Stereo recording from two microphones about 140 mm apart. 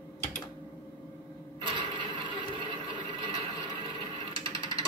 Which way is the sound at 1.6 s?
35° right (ahead or behind).